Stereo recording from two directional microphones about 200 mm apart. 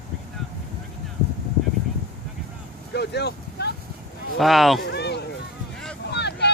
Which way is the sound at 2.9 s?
55° left (ahead or behind).